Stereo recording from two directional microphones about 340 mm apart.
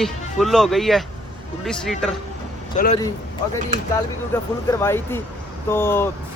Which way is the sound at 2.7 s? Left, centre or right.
Left.